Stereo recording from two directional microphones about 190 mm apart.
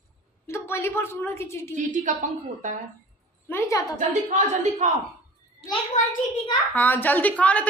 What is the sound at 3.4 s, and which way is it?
Speech, 15° left (ahead or behind).